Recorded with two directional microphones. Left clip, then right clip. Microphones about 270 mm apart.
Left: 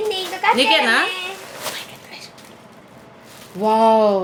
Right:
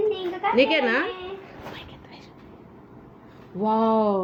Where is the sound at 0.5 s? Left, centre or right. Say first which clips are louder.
Left 5 dB; centre.